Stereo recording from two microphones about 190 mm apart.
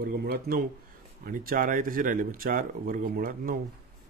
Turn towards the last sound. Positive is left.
turn(degrees=-50)  # may be behind; listen again after turning